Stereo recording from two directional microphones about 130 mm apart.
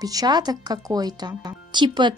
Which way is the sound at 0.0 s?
30° right (ahead or behind).